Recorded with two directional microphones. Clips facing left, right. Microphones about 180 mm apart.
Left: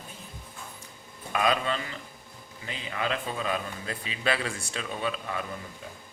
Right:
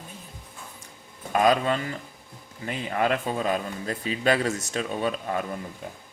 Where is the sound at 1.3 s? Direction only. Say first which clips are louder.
Right 5 dB; 40° right (ahead or behind).